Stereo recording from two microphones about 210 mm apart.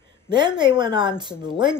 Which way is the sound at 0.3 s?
20° right (ahead or behind).